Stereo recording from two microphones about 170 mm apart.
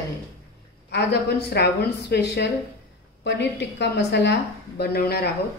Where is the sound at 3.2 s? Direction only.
90° left; by 5.2 s 70° left (ahead or behind).